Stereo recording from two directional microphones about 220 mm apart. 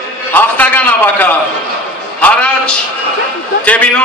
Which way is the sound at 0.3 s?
5° left (ahead or behind).